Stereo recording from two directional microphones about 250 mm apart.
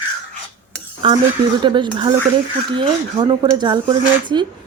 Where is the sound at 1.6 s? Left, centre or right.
Centre.